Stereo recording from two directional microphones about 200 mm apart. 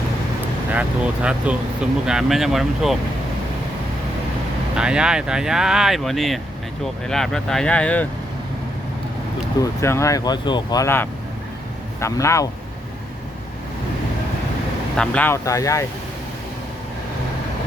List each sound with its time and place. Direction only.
0.7 s speech: 5° right (ahead or behind)
4.8 s speech: 5° right (ahead or behind)
9.8 s speech: 15° left (ahead or behind)
14.9 s speech: 5° left (ahead or behind)